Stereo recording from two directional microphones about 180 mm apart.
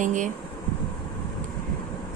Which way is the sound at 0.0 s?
45° right (ahead or behind).